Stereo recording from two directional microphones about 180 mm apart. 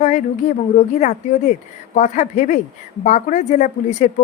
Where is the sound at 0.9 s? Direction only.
40° left (ahead or behind).